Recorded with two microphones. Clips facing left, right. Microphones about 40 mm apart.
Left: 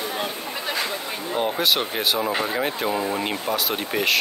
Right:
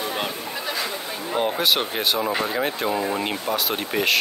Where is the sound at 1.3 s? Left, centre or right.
Centre.